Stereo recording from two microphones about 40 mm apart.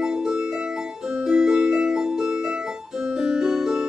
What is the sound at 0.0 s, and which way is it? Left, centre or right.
Music, right.